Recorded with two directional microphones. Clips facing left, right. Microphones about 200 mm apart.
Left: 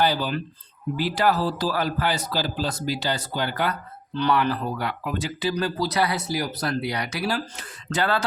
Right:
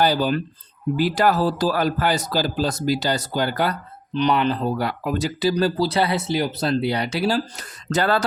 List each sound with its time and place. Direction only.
0.0 s a man's voice: 45° right (ahead or behind)
4.1 s speech: 20° right (ahead or behind); by 8.2 s 40° right (ahead or behind)